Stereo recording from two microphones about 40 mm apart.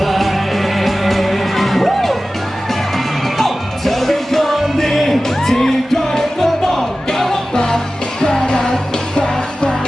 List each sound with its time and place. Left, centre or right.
0.0 s music: centre
3.3 s music: centre